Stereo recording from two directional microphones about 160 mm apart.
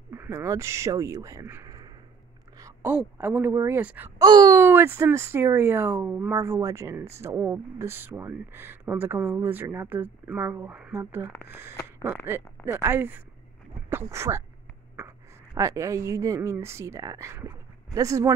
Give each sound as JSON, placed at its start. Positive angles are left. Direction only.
{"t": 0.1, "sound": "speech", "side_deg": -15}
{"t": 4.2, "sound": "a woman's voice", "side_deg": -25}